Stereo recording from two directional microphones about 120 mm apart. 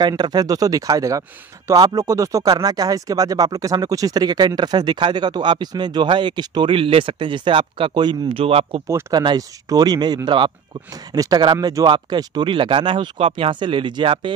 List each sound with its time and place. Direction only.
0.0 s speech: 35° right (ahead or behind); by 8.8 s 55° right (ahead or behind)
9.1 s speech: 35° right (ahead or behind)